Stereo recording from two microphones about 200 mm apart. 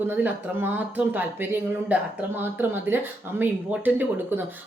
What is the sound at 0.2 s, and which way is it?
Speech, 10° right (ahead or behind).